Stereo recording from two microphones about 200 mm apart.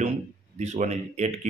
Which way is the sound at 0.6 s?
35° right (ahead or behind).